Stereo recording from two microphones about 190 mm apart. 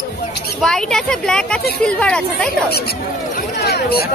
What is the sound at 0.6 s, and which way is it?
Speech, 5° left (ahead or behind).